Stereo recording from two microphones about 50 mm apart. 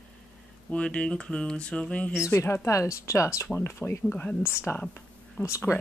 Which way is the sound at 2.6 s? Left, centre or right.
Left.